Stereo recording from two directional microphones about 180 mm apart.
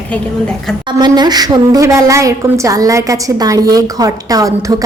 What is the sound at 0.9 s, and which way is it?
A woman's voice, 25° right (ahead or behind).